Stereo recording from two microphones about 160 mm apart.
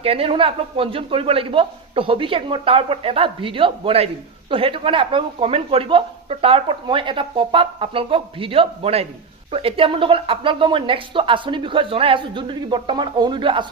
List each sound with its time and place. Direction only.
0.0 s a man's voice: 35° right (ahead or behind)